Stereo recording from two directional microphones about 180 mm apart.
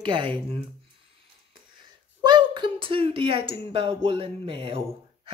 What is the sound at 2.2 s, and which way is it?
Speech, 25° right (ahead or behind).